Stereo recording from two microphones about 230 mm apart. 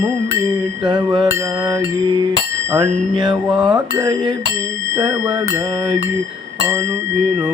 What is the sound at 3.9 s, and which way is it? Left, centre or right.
Speech, centre.